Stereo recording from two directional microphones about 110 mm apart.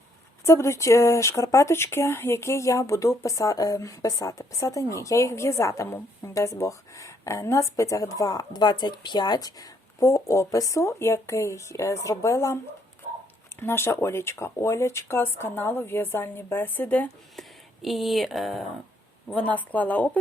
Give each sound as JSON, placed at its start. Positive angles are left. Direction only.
{"t": 0.4, "sound": "speech", "side_deg": 25}
{"t": 13.6, "sound": "speech", "side_deg": 20}
{"t": 17.8, "sound": "speech", "side_deg": 0}
{"t": 19.3, "sound": "speech", "side_deg": 15}